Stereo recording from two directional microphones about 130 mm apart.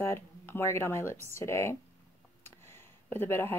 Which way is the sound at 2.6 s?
20° left (ahead or behind).